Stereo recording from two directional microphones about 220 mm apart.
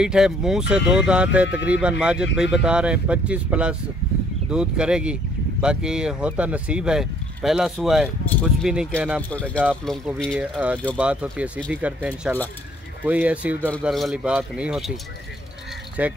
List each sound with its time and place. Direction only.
0.0 s speech: 5° right (ahead or behind)
16.0 s speech: 5° right (ahead or behind)